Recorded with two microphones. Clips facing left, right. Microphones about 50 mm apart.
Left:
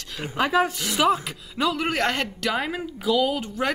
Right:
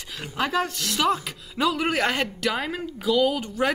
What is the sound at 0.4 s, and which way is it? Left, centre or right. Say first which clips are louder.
Speech: left 3 dB; centre.